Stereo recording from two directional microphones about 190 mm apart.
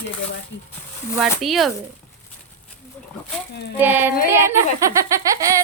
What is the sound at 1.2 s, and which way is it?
Speech, centre (ahead or behind).